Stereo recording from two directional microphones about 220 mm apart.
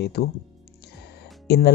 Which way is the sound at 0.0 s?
45° left (ahead or behind).